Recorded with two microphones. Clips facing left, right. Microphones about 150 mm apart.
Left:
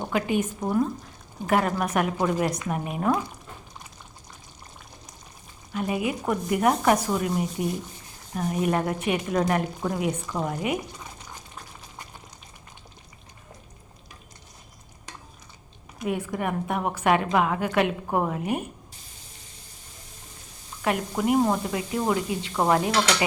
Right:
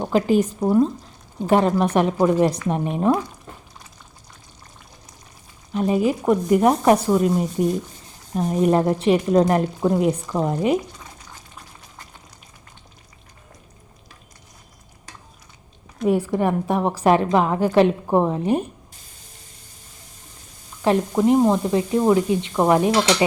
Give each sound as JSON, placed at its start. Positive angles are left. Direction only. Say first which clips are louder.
{"t": 0.1, "sound": "a woman's voice", "louder": "right 8 dB", "side_deg": -35}
{"t": 5.7, "sound": "a woman's voice", "louder": "right 7 dB", "side_deg": -30}
{"t": 16.3, "sound": "a woman's voice", "louder": "right 7 dB", "side_deg": -30}
{"t": 20.8, "sound": "speech", "louder": "right 7 dB", "side_deg": -30}